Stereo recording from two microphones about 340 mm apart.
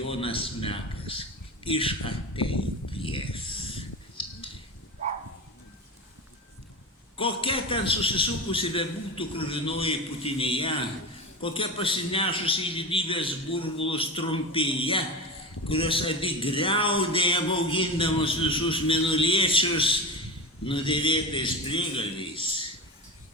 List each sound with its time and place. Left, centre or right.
0.1 s a man's voice: centre
3.8 s a sound: centre
7.2 s a man's voice: centre